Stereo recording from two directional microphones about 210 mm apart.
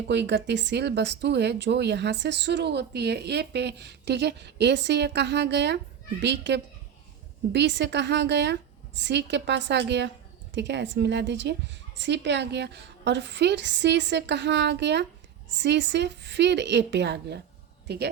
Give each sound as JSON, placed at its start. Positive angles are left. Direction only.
{"t": 0.1, "sound": "a woman's voice", "side_deg": -55}